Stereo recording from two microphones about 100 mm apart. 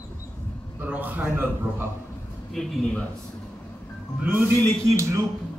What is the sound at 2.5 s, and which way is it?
Speech, 5° left (ahead or behind).